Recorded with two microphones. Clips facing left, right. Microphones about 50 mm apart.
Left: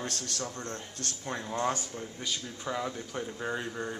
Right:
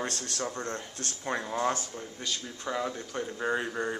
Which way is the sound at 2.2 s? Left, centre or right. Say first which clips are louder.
Right 2 dB; centre.